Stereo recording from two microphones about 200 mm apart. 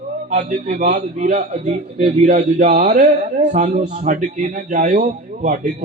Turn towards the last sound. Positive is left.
turn(degrees=-35)  # may be behind; listen again after turning